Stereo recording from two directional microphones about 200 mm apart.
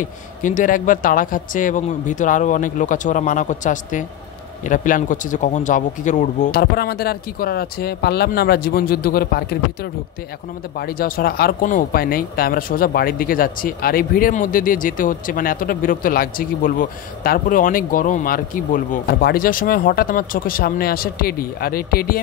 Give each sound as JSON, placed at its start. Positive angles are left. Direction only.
{"t": 0.4, "sound": "speech", "side_deg": 40}
{"t": 6.6, "sound": "speech", "side_deg": 50}